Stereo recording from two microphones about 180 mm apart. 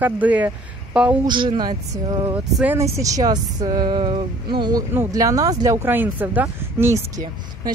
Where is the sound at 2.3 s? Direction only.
10° right (ahead or behind).